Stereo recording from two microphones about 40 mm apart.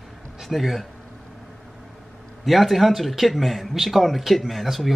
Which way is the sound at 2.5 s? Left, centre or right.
Centre.